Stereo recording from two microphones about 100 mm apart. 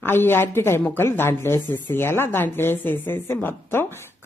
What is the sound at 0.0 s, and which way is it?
A woman's voice, 20° left (ahead or behind).